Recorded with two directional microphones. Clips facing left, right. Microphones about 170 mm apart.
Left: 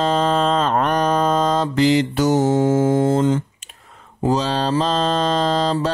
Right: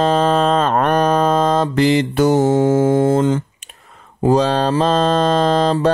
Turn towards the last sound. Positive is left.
turn(degrees=-55)  # may be behind; listen again after turning